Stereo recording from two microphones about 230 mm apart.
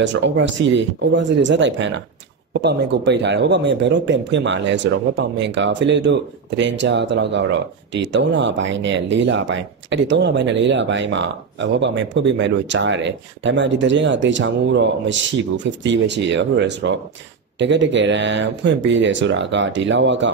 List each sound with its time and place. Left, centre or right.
0.0 s speech: right